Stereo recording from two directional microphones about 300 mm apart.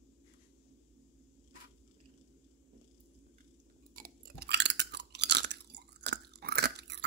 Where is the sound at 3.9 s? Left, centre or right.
Right.